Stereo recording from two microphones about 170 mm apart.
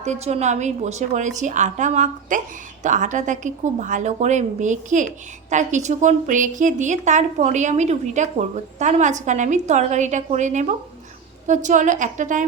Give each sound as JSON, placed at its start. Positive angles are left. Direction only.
{"t": 0.0, "sound": "a woman's voice", "side_deg": -40}